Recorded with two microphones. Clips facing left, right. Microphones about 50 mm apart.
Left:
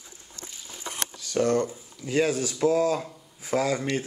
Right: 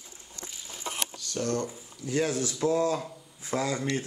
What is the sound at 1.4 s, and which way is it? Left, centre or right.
Speech, centre.